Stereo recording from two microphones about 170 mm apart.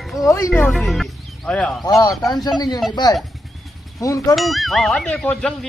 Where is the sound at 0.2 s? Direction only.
20° left (ahead or behind).